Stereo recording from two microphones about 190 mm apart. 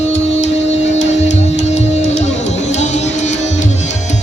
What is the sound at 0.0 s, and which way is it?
Music, 35° left (ahead or behind).